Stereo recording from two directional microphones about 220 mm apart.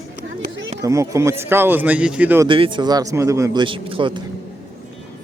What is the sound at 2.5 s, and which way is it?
A man's voice, 20° right (ahead or behind).